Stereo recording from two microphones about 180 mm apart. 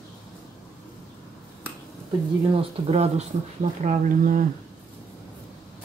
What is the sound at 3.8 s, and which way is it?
Speech, 50° right (ahead or behind).